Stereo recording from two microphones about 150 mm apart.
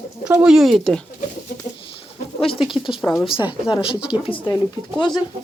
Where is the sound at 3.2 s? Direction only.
35° left (ahead or behind).